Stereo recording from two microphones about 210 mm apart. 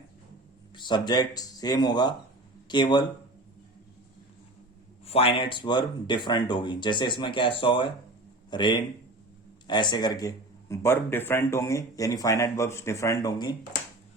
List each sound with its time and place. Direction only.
0.8 s speech: 20° left (ahead or behind)
5.0 s speech: 25° left (ahead or behind)